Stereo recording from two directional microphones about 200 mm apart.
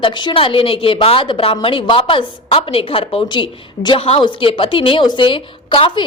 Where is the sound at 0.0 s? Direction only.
25° left (ahead or behind).